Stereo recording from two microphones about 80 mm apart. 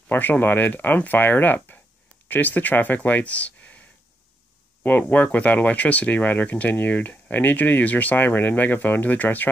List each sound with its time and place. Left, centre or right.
0.1 s speech: left
4.8 s speech: centre